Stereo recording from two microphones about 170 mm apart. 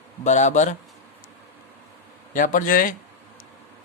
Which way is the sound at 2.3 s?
50° left (ahead or behind).